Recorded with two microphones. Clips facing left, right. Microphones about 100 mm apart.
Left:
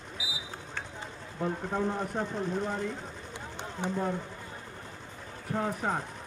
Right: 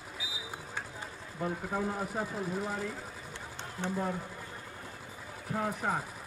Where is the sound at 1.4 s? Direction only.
Centre (ahead or behind).